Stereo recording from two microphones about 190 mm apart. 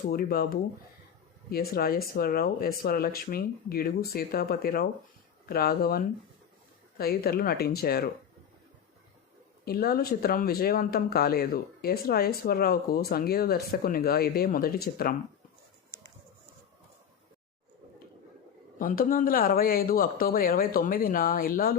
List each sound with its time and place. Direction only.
0.1 s speech: 55° left (ahead or behind)
7.0 s speech: 55° left (ahead or behind)
9.6 s speech: 55° left (ahead or behind)
18.8 s speech: 45° left (ahead or behind)